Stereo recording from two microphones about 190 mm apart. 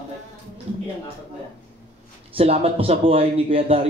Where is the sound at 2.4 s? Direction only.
30° right (ahead or behind).